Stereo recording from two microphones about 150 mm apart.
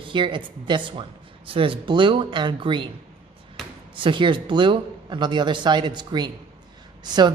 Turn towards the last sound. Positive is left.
turn(degrees=-30)  # may be behind; listen again after turning